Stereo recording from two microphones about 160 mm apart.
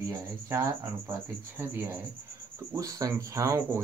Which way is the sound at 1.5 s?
15° right (ahead or behind).